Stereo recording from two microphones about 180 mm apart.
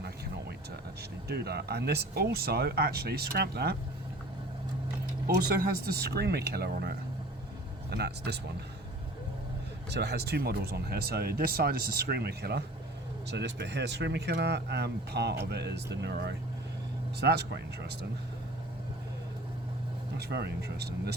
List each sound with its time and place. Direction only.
1.3 s speech: 65° right (ahead or behind)
5.2 s speech: 55° right (ahead or behind)
9.9 s speech: 65° right (ahead or behind)
20.1 s speech: 65° right (ahead or behind)